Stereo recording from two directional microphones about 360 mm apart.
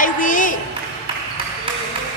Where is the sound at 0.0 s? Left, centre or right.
Left.